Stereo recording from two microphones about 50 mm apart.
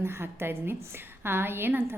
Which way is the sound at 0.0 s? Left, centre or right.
Right.